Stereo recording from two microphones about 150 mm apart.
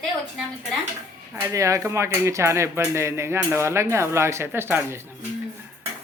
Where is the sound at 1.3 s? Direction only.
20° right (ahead or behind).